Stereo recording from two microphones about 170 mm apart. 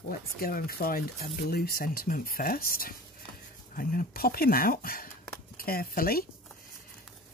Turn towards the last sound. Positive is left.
turn(degrees=60)  # may be behind; listen again after turning